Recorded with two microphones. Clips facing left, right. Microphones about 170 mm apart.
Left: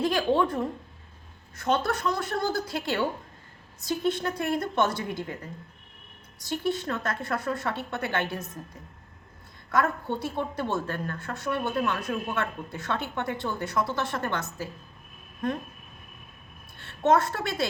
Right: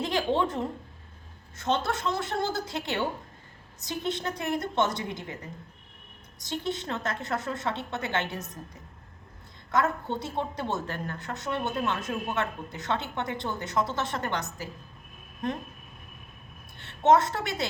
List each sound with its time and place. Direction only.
0.0 s a woman's voice: 20° right (ahead or behind)
6.4 s a woman's voice: 20° right (ahead or behind)
9.7 s a woman's voice: 20° right (ahead or behind)
16.7 s a woman's voice: 20° right (ahead or behind)